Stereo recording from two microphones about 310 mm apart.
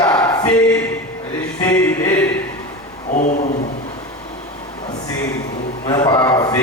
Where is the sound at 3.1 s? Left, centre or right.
Left.